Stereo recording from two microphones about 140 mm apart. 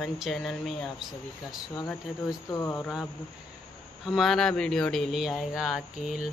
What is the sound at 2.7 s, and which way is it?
Mantra, centre (ahead or behind).